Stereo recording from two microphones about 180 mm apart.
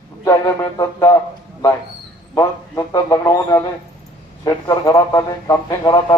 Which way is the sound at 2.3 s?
20° left (ahead or behind).